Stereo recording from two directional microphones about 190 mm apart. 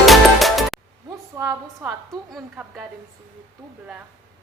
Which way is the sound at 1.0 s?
15° right (ahead or behind).